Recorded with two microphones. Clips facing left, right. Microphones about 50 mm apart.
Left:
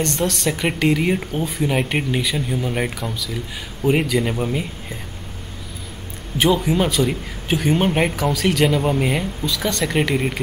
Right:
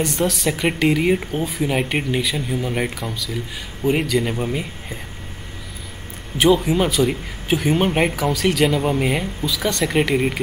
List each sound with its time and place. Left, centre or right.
0.0 s speech: centre
6.3 s speech: centre